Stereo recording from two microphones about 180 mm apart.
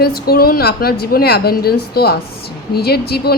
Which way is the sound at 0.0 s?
60° left (ahead or behind).